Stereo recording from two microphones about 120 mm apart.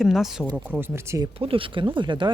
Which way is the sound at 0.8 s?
25° right (ahead or behind).